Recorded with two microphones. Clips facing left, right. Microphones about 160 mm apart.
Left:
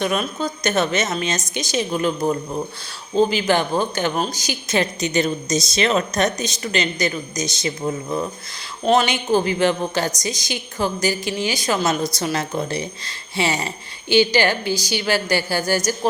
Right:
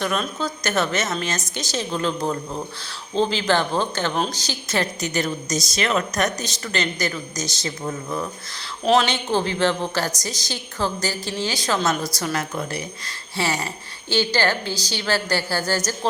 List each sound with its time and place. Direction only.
0.0 s a woman's voice: 15° left (ahead or behind)
8.8 s a woman's voice: centre (ahead or behind)